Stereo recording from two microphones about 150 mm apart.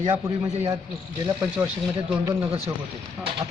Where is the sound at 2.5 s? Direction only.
40° right (ahead or behind).